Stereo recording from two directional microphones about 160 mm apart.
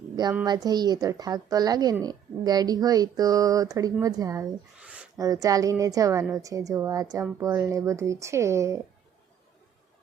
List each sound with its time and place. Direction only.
0.4 s a woman's voice: 25° right (ahead or behind)
4.8 s a sound: 5° right (ahead or behind)
5.1 s a woman's voice: 20° right (ahead or behind)